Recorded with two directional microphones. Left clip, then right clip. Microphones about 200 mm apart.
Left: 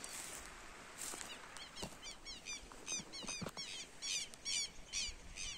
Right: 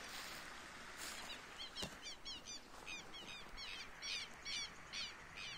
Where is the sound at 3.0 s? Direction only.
55° left (ahead or behind).